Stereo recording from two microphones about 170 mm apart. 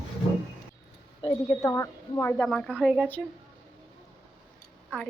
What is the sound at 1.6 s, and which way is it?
Speech, 20° left (ahead or behind).